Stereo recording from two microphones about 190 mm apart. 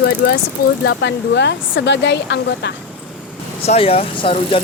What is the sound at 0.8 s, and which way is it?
Speech, 65° left (ahead or behind).